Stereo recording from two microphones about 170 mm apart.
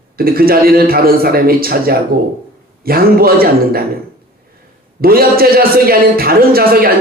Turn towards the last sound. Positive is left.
turn(degrees=-60)  # may be behind; listen again after turning